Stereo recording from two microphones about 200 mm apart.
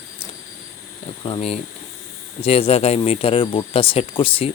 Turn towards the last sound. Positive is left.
turn(degrees=25)  # may be behind; listen again after turning